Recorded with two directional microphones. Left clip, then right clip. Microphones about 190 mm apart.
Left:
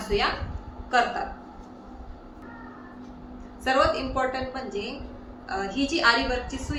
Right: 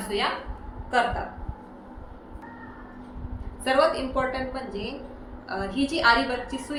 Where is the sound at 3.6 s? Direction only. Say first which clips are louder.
Right 1 dB; 35° right (ahead or behind).